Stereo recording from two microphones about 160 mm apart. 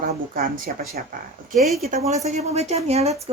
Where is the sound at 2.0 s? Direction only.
45° right (ahead or behind).